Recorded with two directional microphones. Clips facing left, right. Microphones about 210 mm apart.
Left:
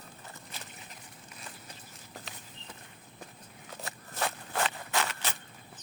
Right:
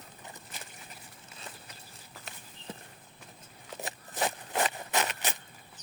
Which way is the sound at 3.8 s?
20° right (ahead or behind).